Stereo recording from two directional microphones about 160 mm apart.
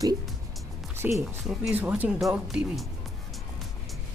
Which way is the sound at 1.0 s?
10° right (ahead or behind).